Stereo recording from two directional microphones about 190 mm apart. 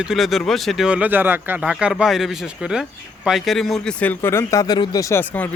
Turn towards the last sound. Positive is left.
turn(degrees=10)  # may be behind; listen again after turning